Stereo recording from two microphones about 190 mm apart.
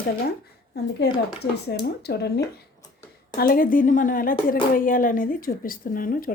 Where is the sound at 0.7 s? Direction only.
60° left (ahead or behind).